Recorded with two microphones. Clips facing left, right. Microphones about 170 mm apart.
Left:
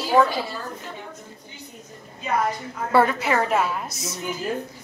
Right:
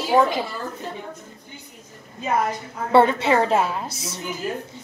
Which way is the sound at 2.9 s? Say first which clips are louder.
Right 3 dB; 25° right (ahead or behind).